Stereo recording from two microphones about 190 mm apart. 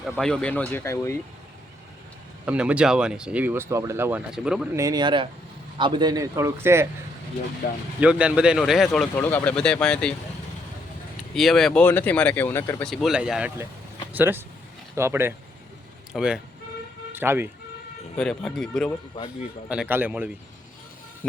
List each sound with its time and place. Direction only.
0.0 s speech: 5° left (ahead or behind)
2.5 s speech: 5° right (ahead or behind)
4.8 s speech: 20° right (ahead or behind)
7.6 s speech: 60° left (ahead or behind)
8.0 s speech: 5° right (ahead or behind)
11.3 s speech: centre (ahead or behind)
12.9 s speech: centre (ahead or behind)
18.2 s speech: 5° left (ahead or behind)
19.6 s speech: 5° right (ahead or behind)